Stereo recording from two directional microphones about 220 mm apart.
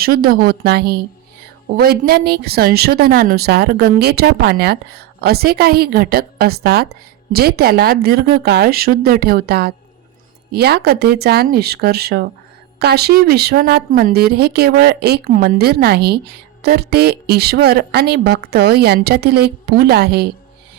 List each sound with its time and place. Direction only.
0.0 s speech: 45° right (ahead or behind)